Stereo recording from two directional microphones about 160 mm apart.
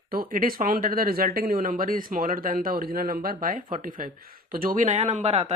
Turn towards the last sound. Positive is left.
turn(degrees=-45)  # may be behind; listen again after turning